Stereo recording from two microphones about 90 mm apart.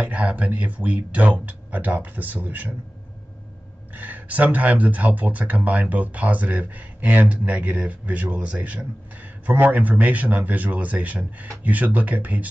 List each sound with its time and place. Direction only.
0.0 s speech: 15° right (ahead or behind)
3.9 s speech: 20° right (ahead or behind)